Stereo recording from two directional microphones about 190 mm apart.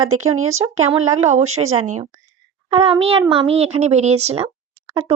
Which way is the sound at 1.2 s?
40° right (ahead or behind).